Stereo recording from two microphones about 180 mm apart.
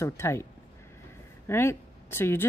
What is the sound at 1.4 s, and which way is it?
Speech, 15° left (ahead or behind).